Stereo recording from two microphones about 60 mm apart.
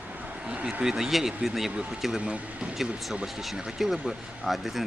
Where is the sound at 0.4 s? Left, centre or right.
Centre.